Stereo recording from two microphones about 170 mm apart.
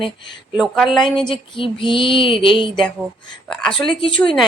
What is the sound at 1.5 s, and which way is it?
Female singing, 30° left (ahead or behind).